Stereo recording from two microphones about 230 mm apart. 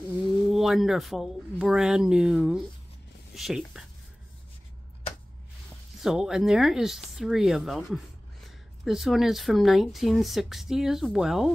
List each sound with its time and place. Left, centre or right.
0.5 s speech: centre
6.0 s speech: centre